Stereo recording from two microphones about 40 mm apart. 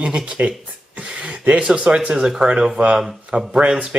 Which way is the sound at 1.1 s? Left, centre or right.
Right.